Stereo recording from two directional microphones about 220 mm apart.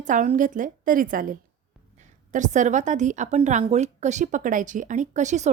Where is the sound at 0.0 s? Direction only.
35° right (ahead or behind).